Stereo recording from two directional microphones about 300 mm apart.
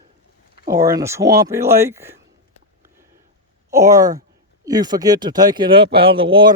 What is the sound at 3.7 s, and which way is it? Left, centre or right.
Speech, centre.